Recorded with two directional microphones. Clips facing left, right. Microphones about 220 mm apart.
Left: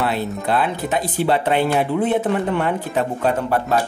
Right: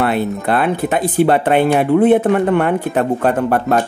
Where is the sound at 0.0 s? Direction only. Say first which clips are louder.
Right 5 dB; 60° right (ahead or behind).